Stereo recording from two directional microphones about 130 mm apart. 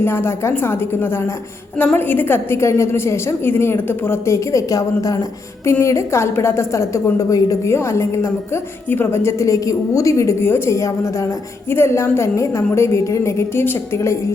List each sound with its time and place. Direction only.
0.0 s a woman's voice: 20° left (ahead or behind)